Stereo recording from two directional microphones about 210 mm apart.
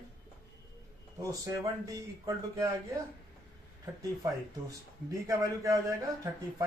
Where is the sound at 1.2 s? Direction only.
15° right (ahead or behind).